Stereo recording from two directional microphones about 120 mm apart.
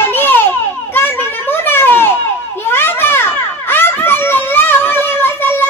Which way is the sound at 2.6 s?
20° left (ahead or behind).